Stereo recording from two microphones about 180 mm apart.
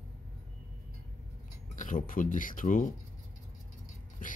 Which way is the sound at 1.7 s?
45° left (ahead or behind).